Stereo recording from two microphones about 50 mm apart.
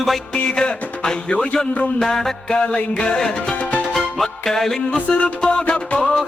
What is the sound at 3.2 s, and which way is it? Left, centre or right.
Music, centre.